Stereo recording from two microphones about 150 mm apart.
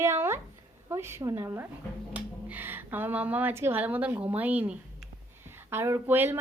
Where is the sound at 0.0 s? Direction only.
15° right (ahead or behind).